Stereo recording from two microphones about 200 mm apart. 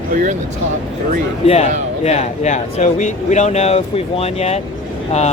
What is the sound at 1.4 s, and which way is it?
Speech, 30° left (ahead or behind).